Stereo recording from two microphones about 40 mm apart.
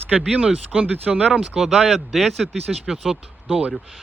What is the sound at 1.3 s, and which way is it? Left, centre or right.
Speech, right.